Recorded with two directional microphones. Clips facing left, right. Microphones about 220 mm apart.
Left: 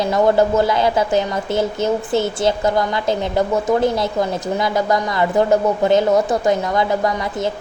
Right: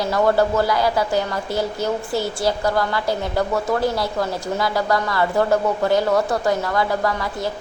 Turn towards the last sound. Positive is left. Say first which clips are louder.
# left 3 dB
turn(degrees=20)  # may be behind; listen again after turning